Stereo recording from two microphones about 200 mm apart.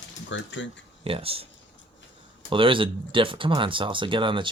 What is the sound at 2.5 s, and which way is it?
Speech, 25° right (ahead or behind).